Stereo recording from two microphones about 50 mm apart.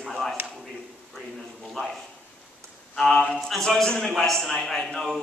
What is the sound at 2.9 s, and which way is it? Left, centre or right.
A man's voice, centre.